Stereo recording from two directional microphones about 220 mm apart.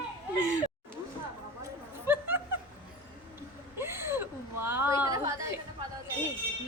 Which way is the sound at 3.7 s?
10° right (ahead or behind).